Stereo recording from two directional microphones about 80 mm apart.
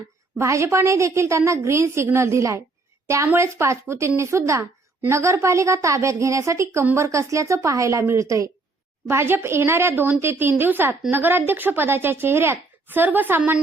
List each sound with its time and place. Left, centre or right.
0.3 s a woman's voice: right